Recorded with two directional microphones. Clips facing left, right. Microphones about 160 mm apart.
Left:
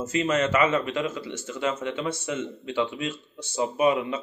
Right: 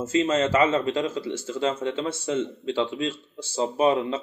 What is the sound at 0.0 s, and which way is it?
A man's voice, 25° right (ahead or behind).